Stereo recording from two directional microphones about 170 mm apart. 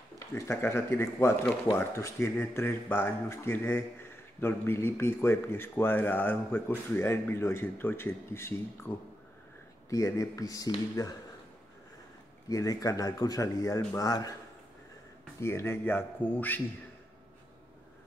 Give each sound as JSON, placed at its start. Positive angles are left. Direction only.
{"t": 0.3, "sound": "speech", "side_deg": 15}
{"t": 12.4, "sound": "speech", "side_deg": 20}
{"t": 15.4, "sound": "speech", "side_deg": 15}